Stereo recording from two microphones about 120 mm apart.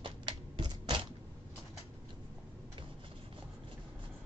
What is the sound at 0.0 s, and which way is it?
Typewriter, 40° right (ahead or behind).